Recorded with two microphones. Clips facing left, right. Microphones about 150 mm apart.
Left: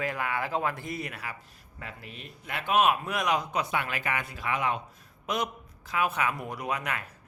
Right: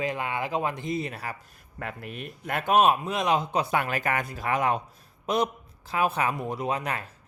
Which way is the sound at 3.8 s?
40° right (ahead or behind).